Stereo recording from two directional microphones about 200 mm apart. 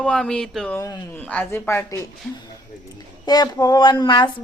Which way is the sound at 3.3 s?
20° left (ahead or behind).